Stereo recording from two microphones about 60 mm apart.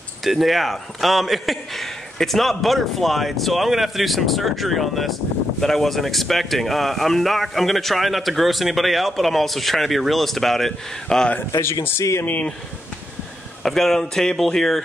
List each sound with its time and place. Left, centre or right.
0.2 s speech: centre
12.0 s speech: left
13.6 s speech: centre